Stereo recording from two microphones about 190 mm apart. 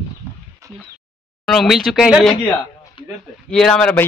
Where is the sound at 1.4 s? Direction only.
Centre (ahead or behind).